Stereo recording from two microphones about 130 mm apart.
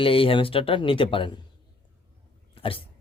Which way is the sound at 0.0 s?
45° left (ahead or behind).